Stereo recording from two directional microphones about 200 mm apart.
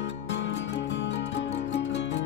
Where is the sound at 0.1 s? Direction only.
60° left (ahead or behind).